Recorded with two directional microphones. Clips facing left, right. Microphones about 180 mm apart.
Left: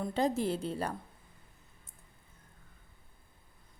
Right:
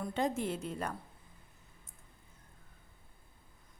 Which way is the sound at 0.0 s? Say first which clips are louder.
Left 3 dB; 35° left (ahead or behind).